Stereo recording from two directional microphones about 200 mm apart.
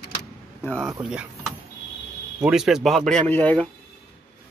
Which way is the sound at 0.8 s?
10° right (ahead or behind).